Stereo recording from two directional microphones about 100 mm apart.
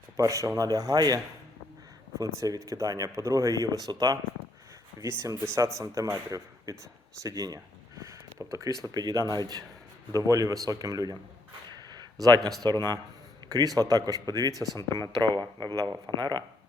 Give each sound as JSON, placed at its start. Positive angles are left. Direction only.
{"t": 0.2, "sound": "speech", "side_deg": -35}
{"t": 5.2, "sound": "speech", "side_deg": -30}
{"t": 11.8, "sound": "a sound", "side_deg": -45}
{"t": 12.6, "sound": "speech", "side_deg": -45}
{"t": 14.8, "sound": "speech", "side_deg": 30}
{"t": 15.2, "sound": "speech", "side_deg": -50}